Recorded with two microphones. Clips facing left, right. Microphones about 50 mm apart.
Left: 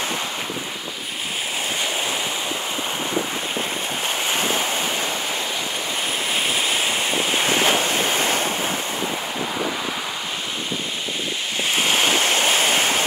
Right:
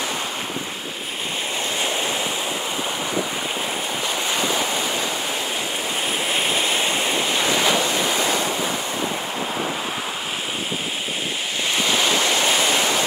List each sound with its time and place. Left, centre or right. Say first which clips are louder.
4.1 s a sound: left 1 dB; left
6.3 s waterfall: even; centre
7.2 s waves: left 2 dB; left
11.8 s waves: left 1 dB; left